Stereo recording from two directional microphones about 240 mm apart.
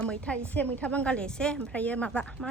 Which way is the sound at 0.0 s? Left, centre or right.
Centre.